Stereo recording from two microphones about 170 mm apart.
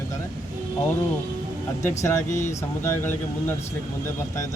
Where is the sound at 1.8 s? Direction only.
15° left (ahead or behind).